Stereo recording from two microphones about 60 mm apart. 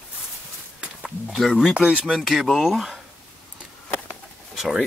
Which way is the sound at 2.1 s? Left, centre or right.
Centre.